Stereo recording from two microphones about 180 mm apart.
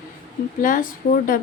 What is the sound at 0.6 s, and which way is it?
Speech, 50° left (ahead or behind).